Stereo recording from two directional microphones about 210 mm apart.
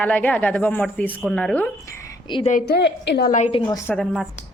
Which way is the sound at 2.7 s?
55° left (ahead or behind).